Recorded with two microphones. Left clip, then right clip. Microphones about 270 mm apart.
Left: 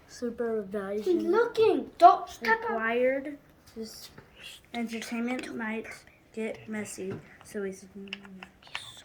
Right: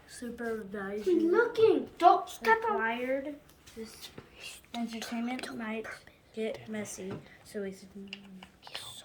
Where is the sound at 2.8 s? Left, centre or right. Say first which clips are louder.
Left 5 dB; centre.